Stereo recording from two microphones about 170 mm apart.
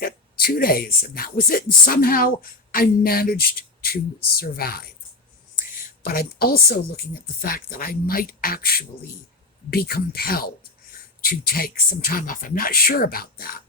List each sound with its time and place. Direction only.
0.0 s speech: 60° left (ahead or behind)